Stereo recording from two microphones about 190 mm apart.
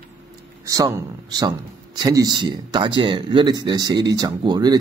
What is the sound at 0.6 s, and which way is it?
Speech, 15° right (ahead or behind).